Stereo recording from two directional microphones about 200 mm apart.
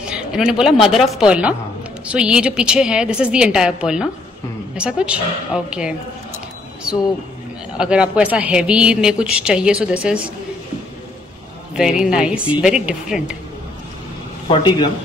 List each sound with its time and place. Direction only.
0.1 s a man's voice: 5° right (ahead or behind)
7.7 s a man's voice: 5° right (ahead or behind)
12.0 s a man's voice: 5° right (ahead or behind)
14.5 s speech: 25° left (ahead or behind)